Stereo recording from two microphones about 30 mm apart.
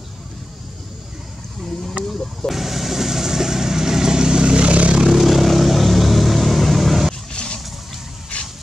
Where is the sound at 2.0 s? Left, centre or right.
Centre.